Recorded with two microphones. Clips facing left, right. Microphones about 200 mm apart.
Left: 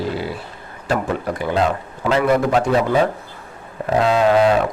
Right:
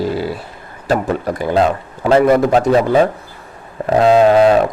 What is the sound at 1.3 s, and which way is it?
A man's voice, 40° right (ahead or behind).